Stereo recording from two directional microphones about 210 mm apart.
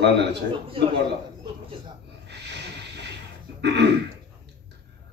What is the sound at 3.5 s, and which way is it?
Throat clearing, 55° right (ahead or behind).